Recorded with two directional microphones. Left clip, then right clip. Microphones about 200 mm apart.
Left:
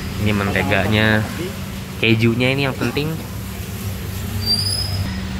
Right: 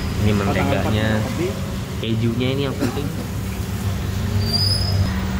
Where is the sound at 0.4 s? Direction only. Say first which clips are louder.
Left 3 dB; 20° left (ahead or behind).